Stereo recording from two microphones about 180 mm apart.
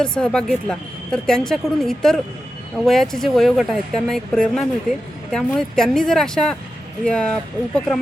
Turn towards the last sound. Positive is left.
turn(degrees=5)  # may be behind; listen again after turning